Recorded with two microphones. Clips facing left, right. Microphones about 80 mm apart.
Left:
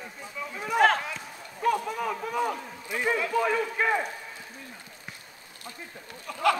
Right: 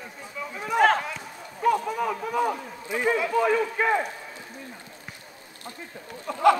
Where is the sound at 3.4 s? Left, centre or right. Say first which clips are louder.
Right 3 dB; centre.